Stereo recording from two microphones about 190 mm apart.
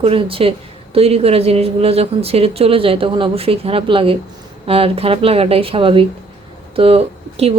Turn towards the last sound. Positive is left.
turn(degrees=-30)  # may be behind; listen again after turning